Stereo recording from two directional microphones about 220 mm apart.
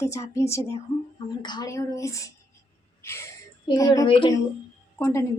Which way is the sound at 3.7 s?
15° left (ahead or behind).